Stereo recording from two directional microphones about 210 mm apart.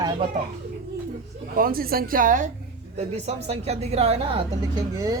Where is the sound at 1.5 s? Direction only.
45° right (ahead or behind); by 5.2 s 15° right (ahead or behind).